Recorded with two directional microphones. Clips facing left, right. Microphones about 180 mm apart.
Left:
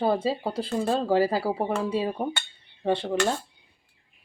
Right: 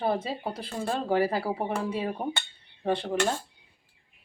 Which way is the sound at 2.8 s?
25° left (ahead or behind).